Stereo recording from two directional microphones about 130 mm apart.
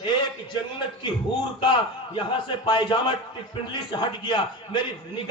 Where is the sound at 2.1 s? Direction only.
40° left (ahead or behind).